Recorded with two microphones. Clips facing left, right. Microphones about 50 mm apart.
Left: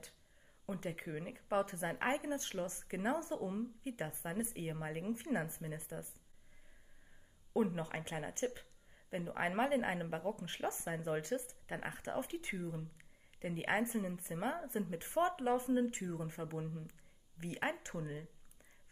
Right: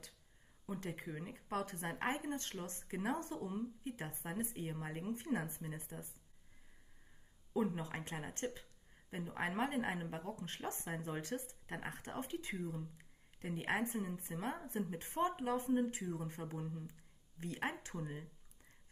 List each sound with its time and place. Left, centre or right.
0.7 s speech: left
7.5 s speech: left
14.7 s speech: left